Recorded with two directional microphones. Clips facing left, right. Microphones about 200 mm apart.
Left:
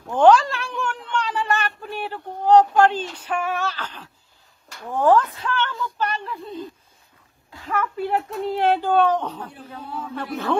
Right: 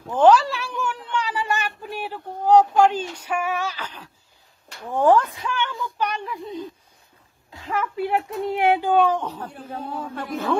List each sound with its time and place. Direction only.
0.1 s a sound: 5° right (ahead or behind)
8.3 s speech: 15° right (ahead or behind)
9.4 s speech: 45° right (ahead or behind)